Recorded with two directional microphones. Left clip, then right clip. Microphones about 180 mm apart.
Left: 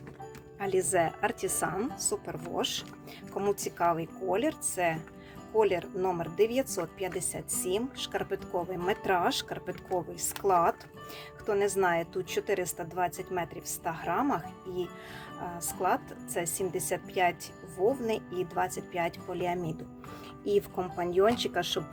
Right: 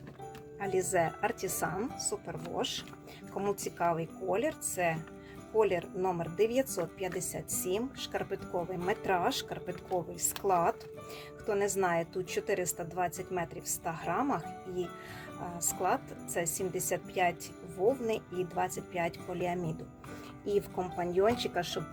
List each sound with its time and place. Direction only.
0.6 s speech: 15° left (ahead or behind)
15.5 s speech: 10° left (ahead or behind)